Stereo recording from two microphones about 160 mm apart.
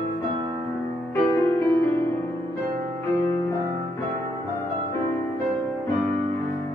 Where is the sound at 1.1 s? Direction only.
15° left (ahead or behind).